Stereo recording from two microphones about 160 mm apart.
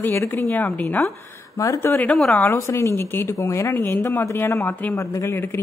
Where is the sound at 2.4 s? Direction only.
20° left (ahead or behind).